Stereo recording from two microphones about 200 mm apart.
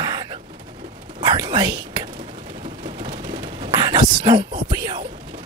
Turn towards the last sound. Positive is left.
turn(degrees=-20)  # may be behind; listen again after turning